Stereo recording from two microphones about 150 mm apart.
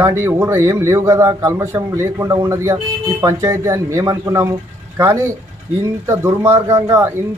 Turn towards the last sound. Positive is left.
turn(degrees=-15)  # may be behind; listen again after turning